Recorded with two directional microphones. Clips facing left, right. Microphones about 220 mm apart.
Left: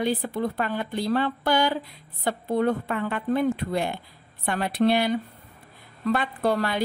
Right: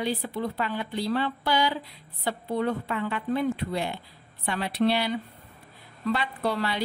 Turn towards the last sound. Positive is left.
turn(degrees=50)  # may be behind; listen again after turning